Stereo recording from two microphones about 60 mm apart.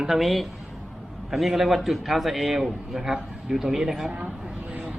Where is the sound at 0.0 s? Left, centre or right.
Centre.